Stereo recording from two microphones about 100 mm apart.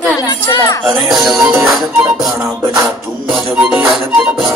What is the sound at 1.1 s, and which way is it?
Music, centre (ahead or behind).